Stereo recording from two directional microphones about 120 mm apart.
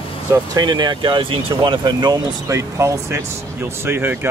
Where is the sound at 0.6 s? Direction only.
35° right (ahead or behind).